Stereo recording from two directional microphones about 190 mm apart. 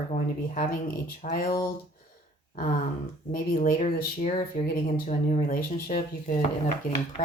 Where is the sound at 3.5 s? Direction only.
50° left (ahead or behind).